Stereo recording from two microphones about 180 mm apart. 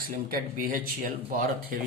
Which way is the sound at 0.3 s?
55° right (ahead or behind).